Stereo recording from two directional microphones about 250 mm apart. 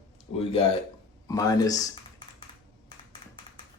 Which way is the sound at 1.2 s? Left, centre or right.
Centre.